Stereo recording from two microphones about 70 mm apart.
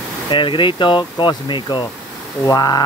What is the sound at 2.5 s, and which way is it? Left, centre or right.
Speech, left.